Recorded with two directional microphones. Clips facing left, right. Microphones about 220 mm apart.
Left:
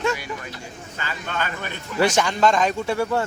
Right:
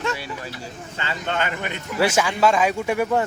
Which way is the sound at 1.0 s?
25° right (ahead or behind).